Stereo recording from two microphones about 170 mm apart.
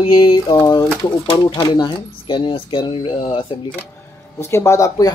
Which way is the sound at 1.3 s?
30° left (ahead or behind).